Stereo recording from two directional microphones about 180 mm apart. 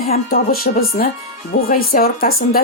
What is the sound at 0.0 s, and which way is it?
A woman's voice, 55° left (ahead or behind).